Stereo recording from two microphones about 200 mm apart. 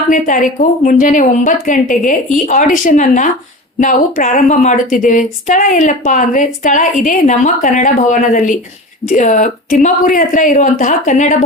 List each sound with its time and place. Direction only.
0.1 s speech: 40° left (ahead or behind)